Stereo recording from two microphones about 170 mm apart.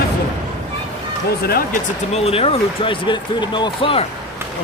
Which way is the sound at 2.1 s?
35° left (ahead or behind).